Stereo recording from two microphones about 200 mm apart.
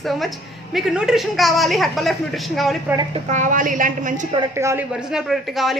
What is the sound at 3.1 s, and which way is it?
A woman's voice, 40° right (ahead or behind).